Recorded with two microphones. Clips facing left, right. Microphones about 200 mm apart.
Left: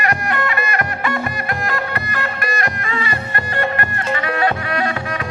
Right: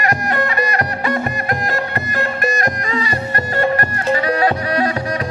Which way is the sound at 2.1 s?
45° right (ahead or behind).